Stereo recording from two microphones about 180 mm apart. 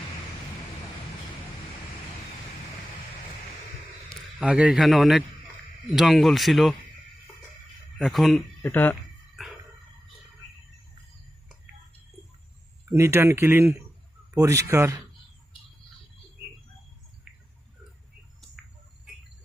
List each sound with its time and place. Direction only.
4.1 s a man's voice: 5° right (ahead or behind)
7.9 s speech: centre (ahead or behind)
8.6 s speech: 10° left (ahead or behind)
9.4 s a sound: centre (ahead or behind)
12.9 s speech: 15° right (ahead or behind)